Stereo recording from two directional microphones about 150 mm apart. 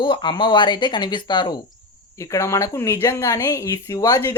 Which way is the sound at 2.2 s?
20° left (ahead or behind).